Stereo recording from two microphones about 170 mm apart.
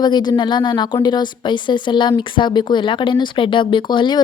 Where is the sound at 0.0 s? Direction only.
25° left (ahead or behind).